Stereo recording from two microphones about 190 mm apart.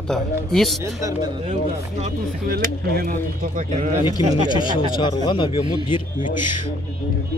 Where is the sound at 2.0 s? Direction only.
35° right (ahead or behind).